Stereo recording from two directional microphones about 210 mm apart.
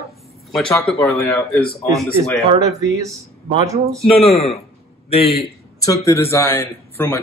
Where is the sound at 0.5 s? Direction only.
Centre (ahead or behind).